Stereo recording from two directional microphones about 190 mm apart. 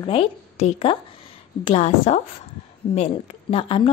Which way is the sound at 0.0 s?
30° left (ahead or behind).